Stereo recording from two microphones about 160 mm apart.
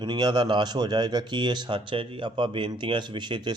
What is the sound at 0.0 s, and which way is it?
A man's voice, 25° right (ahead or behind).